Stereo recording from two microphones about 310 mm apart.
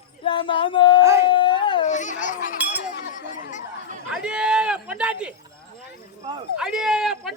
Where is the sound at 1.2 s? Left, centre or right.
Centre.